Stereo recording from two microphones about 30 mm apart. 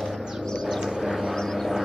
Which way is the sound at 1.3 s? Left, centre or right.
Centre.